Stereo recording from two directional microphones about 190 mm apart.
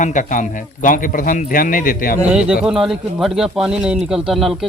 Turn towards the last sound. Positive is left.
turn(degrees=0)  # may be behind; listen again after turning